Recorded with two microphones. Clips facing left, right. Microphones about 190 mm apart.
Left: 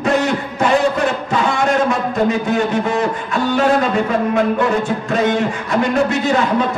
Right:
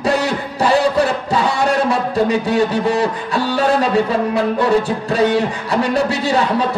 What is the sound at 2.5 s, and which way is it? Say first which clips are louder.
Speech: right 1 dB; 35° right (ahead or behind).